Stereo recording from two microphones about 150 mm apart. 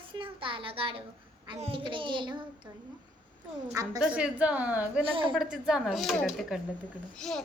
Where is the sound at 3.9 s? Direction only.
5° right (ahead or behind).